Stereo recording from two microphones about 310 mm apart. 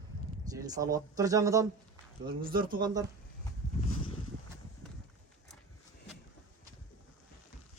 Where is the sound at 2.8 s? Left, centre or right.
Centre.